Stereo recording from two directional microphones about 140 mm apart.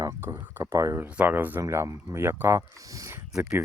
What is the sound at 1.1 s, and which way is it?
Speech, 10° right (ahead or behind).